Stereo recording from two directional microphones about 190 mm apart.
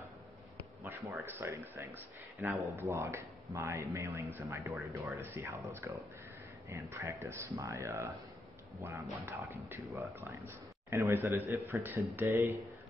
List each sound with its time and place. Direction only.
0.8 s speech: 10° right (ahead or behind)